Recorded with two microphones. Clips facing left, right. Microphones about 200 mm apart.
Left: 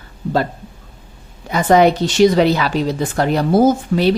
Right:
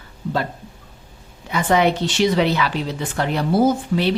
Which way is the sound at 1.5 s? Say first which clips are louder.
Left 5 dB; 40° left (ahead or behind).